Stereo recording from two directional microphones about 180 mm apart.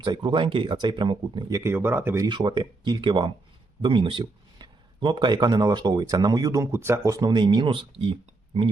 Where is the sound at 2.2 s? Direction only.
25° right (ahead or behind).